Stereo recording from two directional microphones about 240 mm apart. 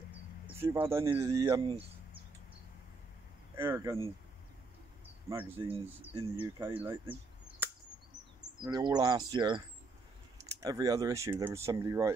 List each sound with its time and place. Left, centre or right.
0.1 s speech: centre
3.5 s speech: centre
5.3 s speech: centre
5.7 s speech: right
6.4 s speech: centre
8.6 s speech: centre